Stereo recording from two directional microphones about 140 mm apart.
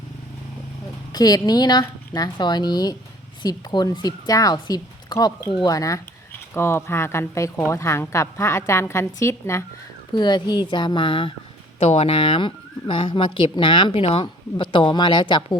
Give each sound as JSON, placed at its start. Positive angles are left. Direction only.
{"t": 1.1, "sound": "speech", "side_deg": 25}
{"t": 10.1, "sound": "speech", "side_deg": 30}